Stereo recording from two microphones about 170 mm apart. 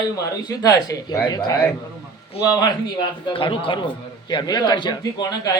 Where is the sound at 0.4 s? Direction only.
20° left (ahead or behind).